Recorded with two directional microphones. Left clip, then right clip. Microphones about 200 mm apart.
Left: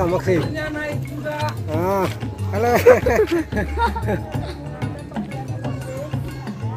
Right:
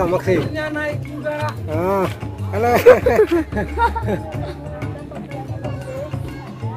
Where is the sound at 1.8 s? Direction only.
20° left (ahead or behind).